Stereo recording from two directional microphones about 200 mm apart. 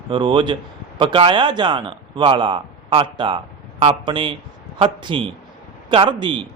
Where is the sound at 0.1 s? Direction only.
25° right (ahead or behind).